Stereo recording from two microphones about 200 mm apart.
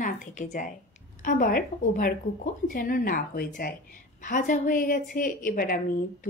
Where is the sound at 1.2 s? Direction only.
45° left (ahead or behind).